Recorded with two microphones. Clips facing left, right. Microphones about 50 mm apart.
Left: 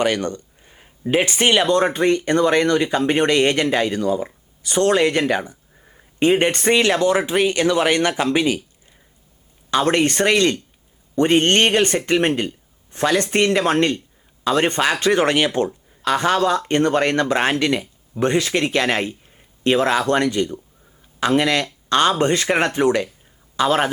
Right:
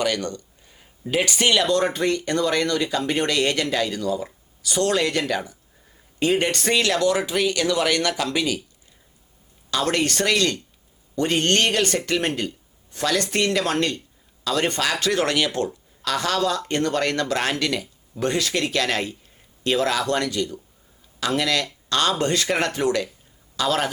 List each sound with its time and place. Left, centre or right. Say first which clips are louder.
0.0 s speech: left 4 dB; left
9.6 s speech: left 5 dB; left